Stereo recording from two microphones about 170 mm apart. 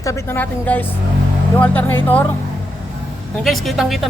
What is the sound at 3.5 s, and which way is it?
Speech, centre (ahead or behind).